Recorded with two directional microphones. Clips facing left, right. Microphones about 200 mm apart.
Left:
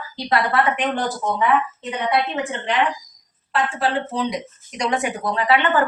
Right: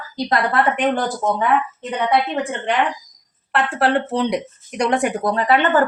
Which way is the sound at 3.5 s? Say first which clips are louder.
Right 3 dB; 65° right (ahead or behind).